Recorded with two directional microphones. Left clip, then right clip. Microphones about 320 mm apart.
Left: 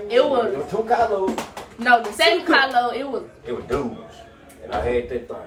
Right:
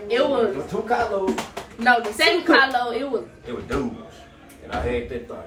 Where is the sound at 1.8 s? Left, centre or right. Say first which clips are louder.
Left 2 dB; centre.